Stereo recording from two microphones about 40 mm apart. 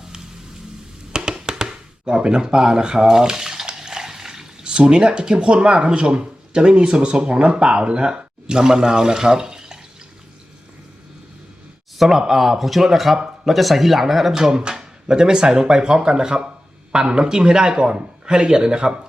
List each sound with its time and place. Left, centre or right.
1.1 s music: centre
3.7 s a sound: centre
4.6 s speech: right
11.9 s speech: centre